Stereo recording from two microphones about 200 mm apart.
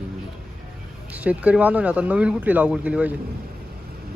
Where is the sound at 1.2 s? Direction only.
5° right (ahead or behind).